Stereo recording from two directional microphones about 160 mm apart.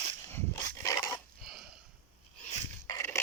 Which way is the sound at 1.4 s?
Centre (ahead or behind).